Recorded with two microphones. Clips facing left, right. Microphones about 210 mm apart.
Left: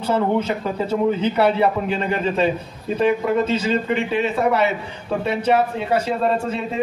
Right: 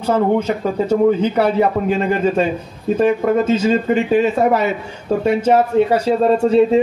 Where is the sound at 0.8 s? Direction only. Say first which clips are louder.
Right 5 dB; 45° right (ahead or behind).